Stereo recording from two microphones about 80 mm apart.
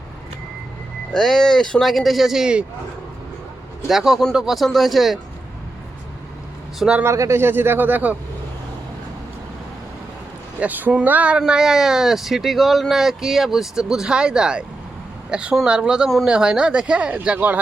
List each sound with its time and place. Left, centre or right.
1.1 s speech: centre
3.8 s speech: centre
7.0 s speech: right
10.6 s speech: right
16.0 s speech: centre
16.3 s speech: centre